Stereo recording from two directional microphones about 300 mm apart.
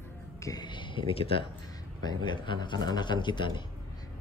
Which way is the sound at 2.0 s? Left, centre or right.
Centre.